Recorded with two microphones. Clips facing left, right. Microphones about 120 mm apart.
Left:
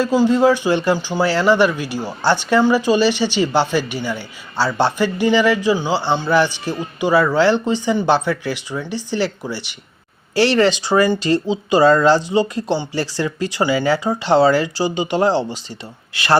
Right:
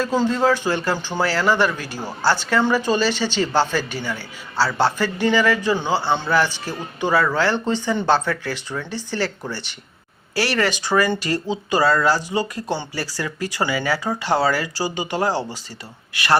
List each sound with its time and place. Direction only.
0.0 s speech: 10° left (ahead or behind)
10.3 s speech: 25° left (ahead or behind)